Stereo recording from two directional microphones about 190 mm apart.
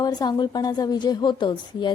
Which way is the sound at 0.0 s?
20° left (ahead or behind).